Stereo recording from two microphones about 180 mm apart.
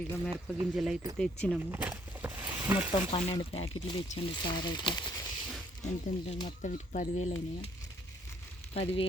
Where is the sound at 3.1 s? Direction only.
30° left (ahead or behind).